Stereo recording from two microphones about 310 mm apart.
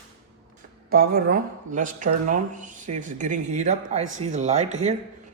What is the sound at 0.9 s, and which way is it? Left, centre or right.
Speech, right.